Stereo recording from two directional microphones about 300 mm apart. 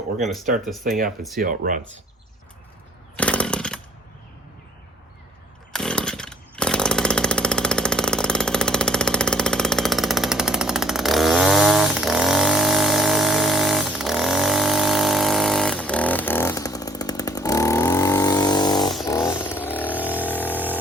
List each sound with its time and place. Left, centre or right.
0.9 s speech: right
3.2 s chainsaw: centre
5.7 s chainsaw: centre
19.0 s vehicle: centre